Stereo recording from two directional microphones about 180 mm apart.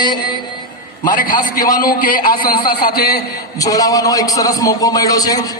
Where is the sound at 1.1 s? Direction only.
50° left (ahead or behind).